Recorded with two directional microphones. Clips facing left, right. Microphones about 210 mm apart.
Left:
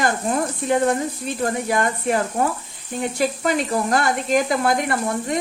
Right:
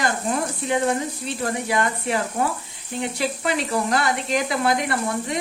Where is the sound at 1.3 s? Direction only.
45° left (ahead or behind).